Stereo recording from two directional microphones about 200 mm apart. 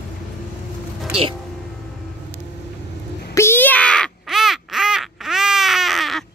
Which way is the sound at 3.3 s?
10° left (ahead or behind).